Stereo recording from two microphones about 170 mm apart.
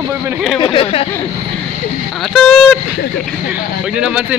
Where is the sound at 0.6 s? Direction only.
30° left (ahead or behind).